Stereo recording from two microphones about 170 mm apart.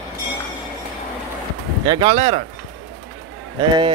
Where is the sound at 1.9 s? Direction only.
30° right (ahead or behind).